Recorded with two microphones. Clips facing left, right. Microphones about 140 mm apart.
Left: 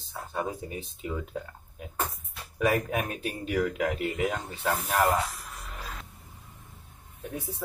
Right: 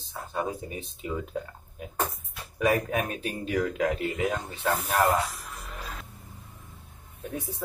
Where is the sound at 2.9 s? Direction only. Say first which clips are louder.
Right 1 dB; 5° left (ahead or behind).